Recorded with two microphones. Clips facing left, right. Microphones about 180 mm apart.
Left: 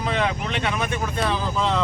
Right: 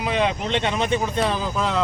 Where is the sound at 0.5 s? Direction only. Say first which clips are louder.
Right 3 dB; 25° right (ahead or behind).